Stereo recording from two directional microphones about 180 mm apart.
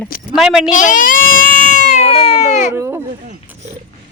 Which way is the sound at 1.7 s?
45° left (ahead or behind).